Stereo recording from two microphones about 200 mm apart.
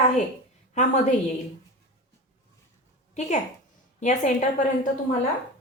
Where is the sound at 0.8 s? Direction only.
35° left (ahead or behind).